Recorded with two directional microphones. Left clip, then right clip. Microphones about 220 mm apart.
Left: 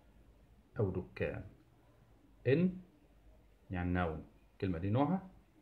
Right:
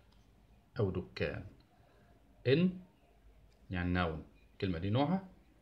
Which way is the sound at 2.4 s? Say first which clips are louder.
Right 1 dB; 15° right (ahead or behind).